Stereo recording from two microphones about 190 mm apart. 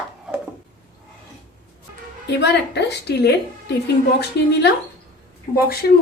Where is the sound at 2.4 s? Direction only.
60° left (ahead or behind).